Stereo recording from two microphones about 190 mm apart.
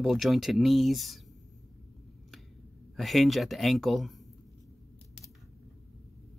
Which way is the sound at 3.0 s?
Centre (ahead or behind).